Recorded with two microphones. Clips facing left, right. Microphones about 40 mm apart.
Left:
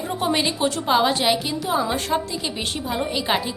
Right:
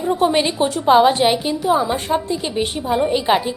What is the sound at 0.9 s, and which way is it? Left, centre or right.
A woman's voice, right.